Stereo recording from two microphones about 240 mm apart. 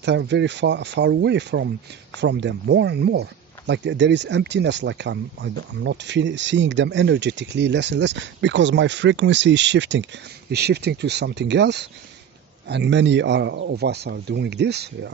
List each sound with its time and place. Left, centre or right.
0.0 s speech: right